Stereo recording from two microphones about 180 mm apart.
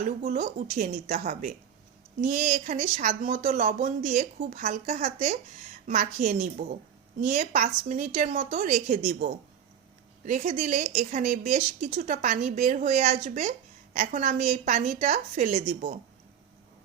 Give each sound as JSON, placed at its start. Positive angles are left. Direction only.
{"t": 0.0, "sound": "speech", "side_deg": -45}